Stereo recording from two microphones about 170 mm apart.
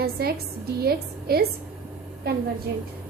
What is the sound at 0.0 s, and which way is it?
A woman's voice, 65° right (ahead or behind).